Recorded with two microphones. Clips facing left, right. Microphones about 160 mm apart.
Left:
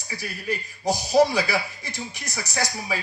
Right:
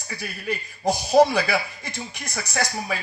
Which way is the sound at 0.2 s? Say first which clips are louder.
Even; 55° right (ahead or behind).